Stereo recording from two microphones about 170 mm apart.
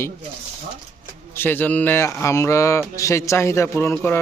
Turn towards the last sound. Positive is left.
turn(degrees=10)  # may be behind; listen again after turning